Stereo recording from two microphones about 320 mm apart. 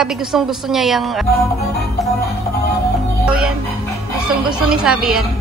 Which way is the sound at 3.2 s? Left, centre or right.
Centre.